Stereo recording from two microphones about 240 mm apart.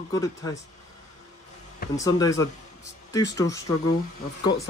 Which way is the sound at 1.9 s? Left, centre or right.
Centre.